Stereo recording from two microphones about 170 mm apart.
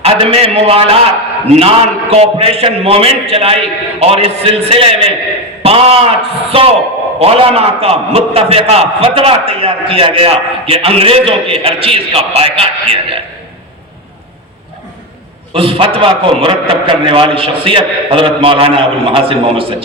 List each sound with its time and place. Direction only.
0.0 s a man's voice: 35° right (ahead or behind)
15.5 s a man's voice: 30° right (ahead or behind)